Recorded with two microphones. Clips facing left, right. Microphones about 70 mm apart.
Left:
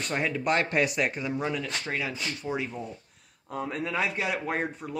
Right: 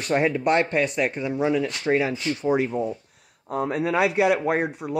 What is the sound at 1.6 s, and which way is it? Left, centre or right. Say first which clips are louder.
Speech: right 10 dB; right.